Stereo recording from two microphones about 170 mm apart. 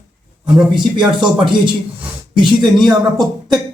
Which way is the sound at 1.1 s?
25° right (ahead or behind).